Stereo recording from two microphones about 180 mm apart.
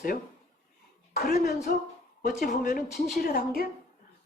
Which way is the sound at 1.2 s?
55° left (ahead or behind).